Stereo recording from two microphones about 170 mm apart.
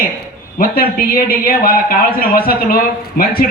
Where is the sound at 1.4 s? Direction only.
60° left (ahead or behind).